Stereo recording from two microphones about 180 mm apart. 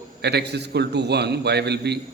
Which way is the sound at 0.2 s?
65° right (ahead or behind).